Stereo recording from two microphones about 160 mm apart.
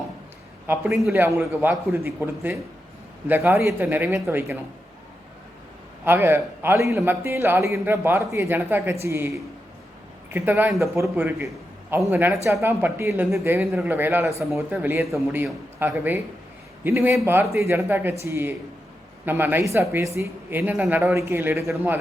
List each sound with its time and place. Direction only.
1.1 s a man's voice: 15° right (ahead or behind)
6.1 s a man's voice: 15° right (ahead or behind)